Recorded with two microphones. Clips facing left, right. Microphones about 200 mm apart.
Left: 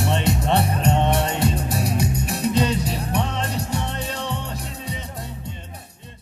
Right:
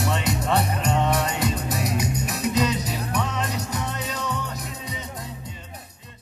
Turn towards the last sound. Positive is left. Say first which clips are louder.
# left 1 dB
turn(degrees=30)  # may be behind; listen again after turning